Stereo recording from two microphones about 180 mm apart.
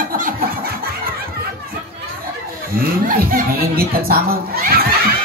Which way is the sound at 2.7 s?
55° right (ahead or behind).